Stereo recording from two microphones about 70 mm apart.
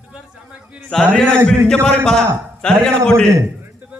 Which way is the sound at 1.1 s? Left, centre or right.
Centre.